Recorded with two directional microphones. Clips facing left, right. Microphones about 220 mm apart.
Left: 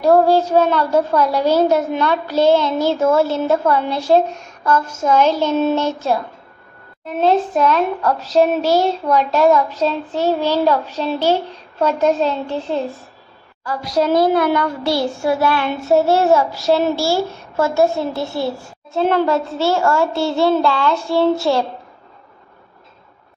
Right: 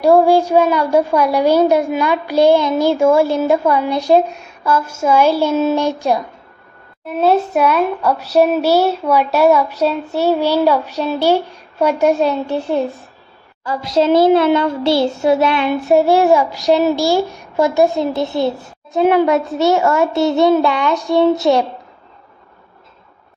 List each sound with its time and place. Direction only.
0.0 s a woman's voice: 10° right (ahead or behind)
7.2 s a woman's voice: 10° right (ahead or behind)
13.7 s a child's voice: 25° right (ahead or behind)